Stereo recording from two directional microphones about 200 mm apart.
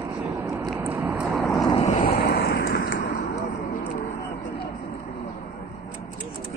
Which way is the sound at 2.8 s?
45° left (ahead or behind).